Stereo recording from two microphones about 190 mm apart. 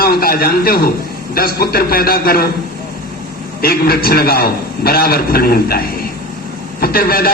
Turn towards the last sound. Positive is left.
turn(degrees=50)  # may be behind; listen again after turning